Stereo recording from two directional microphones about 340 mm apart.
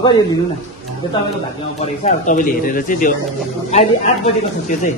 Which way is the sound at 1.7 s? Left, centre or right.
Centre.